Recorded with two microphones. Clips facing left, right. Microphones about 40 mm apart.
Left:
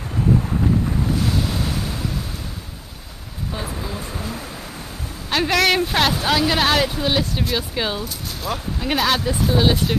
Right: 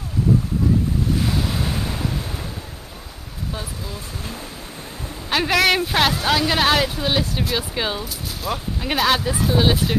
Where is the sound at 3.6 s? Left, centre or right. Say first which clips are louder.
Left 4 dB; left.